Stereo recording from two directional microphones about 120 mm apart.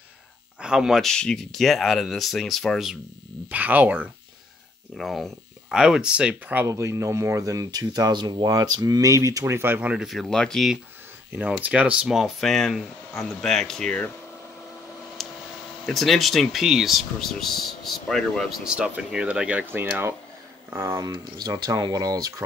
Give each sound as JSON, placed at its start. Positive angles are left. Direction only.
{"t": 0.6, "sound": "speech", "side_deg": -5}
{"t": 3.4, "sound": "speech", "side_deg": -15}
{"t": 4.9, "sound": "speech", "side_deg": 0}
{"t": 6.6, "sound": "speech", "side_deg": -25}
{"t": 10.0, "sound": "speech", "side_deg": 0}
{"t": 11.3, "sound": "speech", "side_deg": -10}
{"t": 15.2, "sound": "a sound", "side_deg": 0}
{"t": 15.8, "sound": "speech", "side_deg": 0}
{"t": 18.6, "sound": "speech", "side_deg": -10}
{"t": 21.0, "sound": "speech", "side_deg": -35}